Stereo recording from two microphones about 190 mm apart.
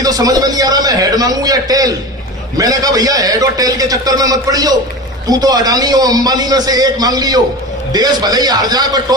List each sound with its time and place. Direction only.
0.0 s a man's voice: 20° right (ahead or behind)